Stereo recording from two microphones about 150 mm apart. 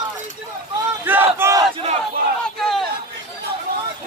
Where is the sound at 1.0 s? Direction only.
15° right (ahead or behind).